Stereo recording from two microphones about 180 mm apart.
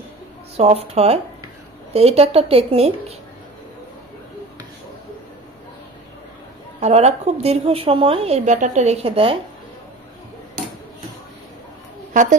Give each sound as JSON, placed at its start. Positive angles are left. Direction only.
{"t": 0.6, "sound": "a woman's voice", "side_deg": -35}
{"t": 6.8, "sound": "a woman's voice", "side_deg": -35}
{"t": 12.1, "sound": "a woman's voice", "side_deg": -45}